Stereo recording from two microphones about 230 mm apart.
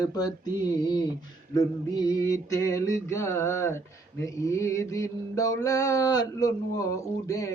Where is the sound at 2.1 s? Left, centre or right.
Centre.